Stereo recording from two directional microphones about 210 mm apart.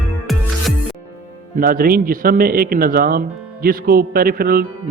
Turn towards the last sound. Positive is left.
turn(degrees=-45)  # may be behind; listen again after turning